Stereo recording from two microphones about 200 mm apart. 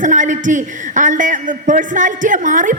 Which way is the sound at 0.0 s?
40° right (ahead or behind).